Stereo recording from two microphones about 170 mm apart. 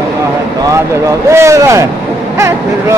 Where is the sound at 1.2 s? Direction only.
15° right (ahead or behind).